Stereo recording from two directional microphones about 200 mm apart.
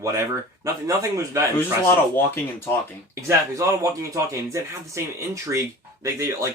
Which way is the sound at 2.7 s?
10° left (ahead or behind).